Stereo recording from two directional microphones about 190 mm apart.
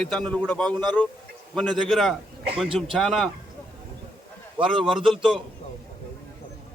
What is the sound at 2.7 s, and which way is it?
Speech, 30° right (ahead or behind).